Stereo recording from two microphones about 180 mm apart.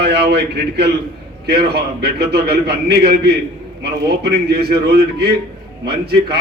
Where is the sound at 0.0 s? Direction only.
70° right (ahead or behind).